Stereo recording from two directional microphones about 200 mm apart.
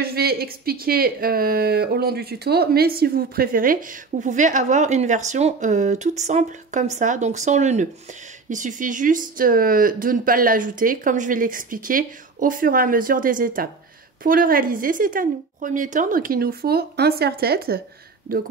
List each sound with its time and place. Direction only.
0.0 s speech: 50° right (ahead or behind)